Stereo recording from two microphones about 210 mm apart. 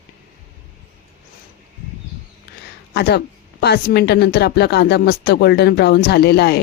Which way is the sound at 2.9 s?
50° left (ahead or behind).